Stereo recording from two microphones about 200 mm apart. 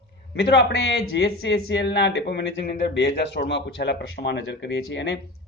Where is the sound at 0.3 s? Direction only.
55° left (ahead or behind).